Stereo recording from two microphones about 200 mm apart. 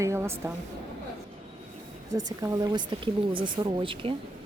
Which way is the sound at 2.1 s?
15° right (ahead or behind).